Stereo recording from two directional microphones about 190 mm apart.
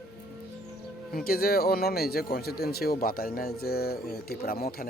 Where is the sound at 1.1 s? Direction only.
50° left (ahead or behind).